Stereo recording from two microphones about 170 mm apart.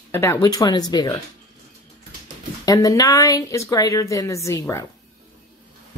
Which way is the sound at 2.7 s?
20° left (ahead or behind).